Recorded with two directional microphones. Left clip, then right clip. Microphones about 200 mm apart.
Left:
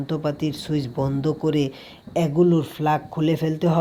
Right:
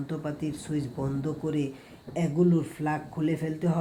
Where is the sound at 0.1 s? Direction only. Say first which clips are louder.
Left 10 dB; 30° left (ahead or behind).